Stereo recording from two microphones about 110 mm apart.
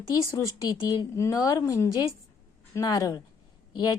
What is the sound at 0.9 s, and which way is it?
A woman's voice, 30° left (ahead or behind).